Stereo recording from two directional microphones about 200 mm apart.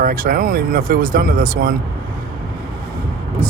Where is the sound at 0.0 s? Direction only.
45° right (ahead or behind).